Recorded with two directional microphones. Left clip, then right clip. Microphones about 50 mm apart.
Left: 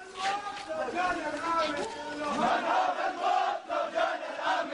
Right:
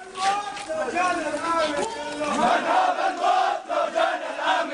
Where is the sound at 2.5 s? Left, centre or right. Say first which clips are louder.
Right 7 dB; right.